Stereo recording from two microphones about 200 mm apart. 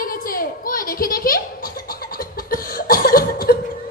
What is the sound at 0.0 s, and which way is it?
Giggle, 45° left (ahead or behind).